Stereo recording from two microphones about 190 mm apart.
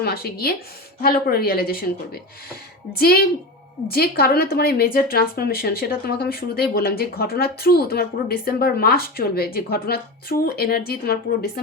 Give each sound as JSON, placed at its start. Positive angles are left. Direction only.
{"t": 0.0, "sound": "a woman's voice", "side_deg": 55}
{"t": 3.0, "sound": "a woman's voice", "side_deg": 55}